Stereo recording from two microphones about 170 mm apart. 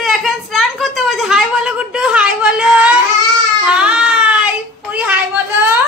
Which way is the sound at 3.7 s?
5° right (ahead or behind).